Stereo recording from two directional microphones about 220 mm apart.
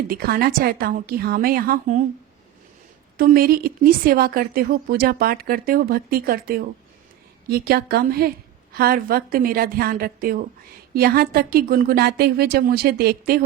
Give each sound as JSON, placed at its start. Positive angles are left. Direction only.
{"t": 0.1, "sound": "a woman's voice", "side_deg": -45}
{"t": 3.2, "sound": "a woman's voice", "side_deg": -40}